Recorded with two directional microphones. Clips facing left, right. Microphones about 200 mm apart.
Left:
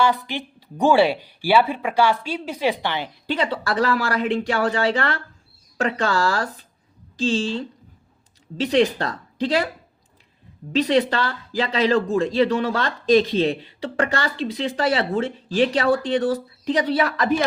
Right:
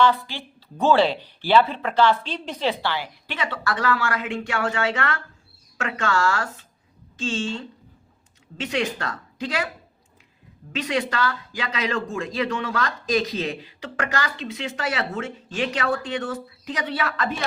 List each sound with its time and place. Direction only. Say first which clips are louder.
0.0 s a woman's voice: even; 15° left (ahead or behind)
3.5 s speech: even; 35° left (ahead or behind)
10.7 s speech: left 7 dB; 35° left (ahead or behind)